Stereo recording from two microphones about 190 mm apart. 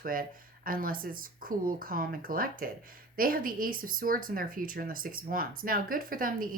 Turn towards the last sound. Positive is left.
turn(degrees=-45)  # may be behind; listen again after turning